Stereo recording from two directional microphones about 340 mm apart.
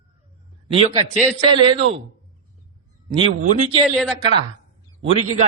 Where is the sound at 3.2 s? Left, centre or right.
Centre.